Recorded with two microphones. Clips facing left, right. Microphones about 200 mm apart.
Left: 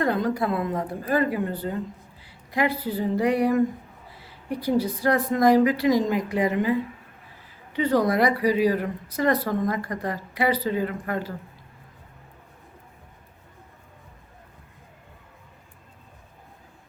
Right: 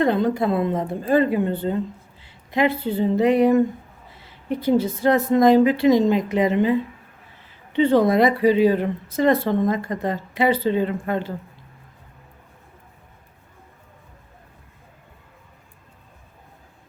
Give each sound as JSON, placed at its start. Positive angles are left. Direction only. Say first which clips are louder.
{"t": 0.0, "sound": "speech", "louder": "right 4 dB", "side_deg": -25}